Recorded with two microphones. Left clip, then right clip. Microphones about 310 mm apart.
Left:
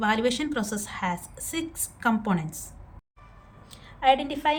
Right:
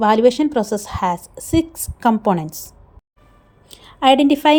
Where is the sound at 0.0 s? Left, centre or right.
Centre.